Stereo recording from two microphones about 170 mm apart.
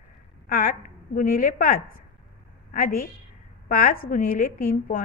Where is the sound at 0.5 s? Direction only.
55° left (ahead or behind).